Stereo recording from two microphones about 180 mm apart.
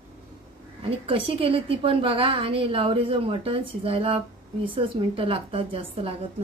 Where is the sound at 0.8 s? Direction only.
30° right (ahead or behind).